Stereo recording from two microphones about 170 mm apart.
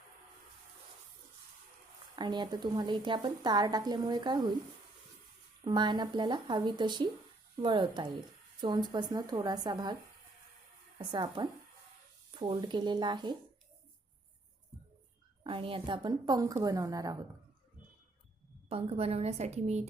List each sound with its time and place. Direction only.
2.1 s a woman's voice: 25° right (ahead or behind)
5.6 s a woman's voice: 25° right (ahead or behind)
10.9 s a woman's voice: 25° right (ahead or behind)
15.4 s a woman's voice: 30° right (ahead or behind)
18.7 s a woman's voice: 35° right (ahead or behind)